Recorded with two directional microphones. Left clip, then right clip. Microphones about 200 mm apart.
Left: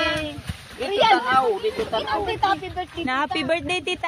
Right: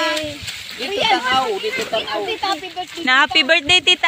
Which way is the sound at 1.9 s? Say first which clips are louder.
Right 2 dB; 30° right (ahead or behind).